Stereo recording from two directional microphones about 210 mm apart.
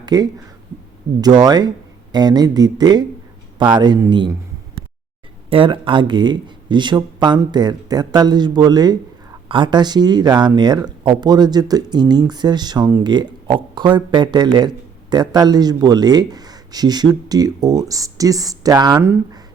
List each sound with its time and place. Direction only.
0.0 s speech: 20° right (ahead or behind)